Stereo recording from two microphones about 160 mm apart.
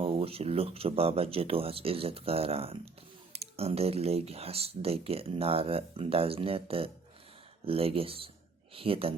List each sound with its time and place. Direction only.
0.0 s speech: 35° right (ahead or behind)